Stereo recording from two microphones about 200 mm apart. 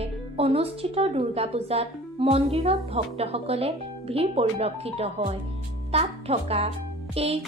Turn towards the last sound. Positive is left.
turn(degrees=-30)  # may be behind; listen again after turning